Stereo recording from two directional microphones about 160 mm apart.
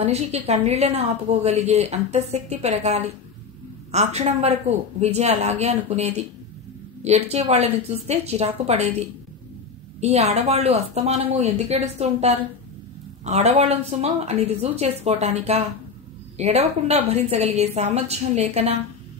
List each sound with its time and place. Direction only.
0.0 s a woman's voice: 40° right (ahead or behind)
9.9 s a woman's voice: 40° right (ahead or behind)